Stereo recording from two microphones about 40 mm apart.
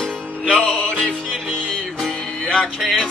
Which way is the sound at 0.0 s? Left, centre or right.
Centre.